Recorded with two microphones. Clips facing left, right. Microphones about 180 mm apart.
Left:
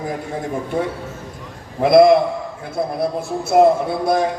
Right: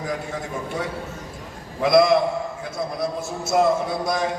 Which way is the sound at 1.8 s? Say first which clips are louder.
Left 5 dB; 55° left (ahead or behind).